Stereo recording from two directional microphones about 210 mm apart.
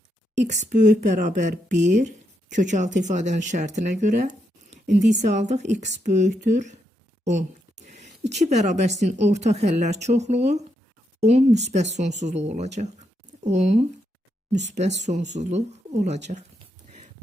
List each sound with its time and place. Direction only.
0.4 s speech: 35° right (ahead or behind)
7.3 s a sound: 35° right (ahead or behind)
8.3 s speech: 35° right (ahead or behind)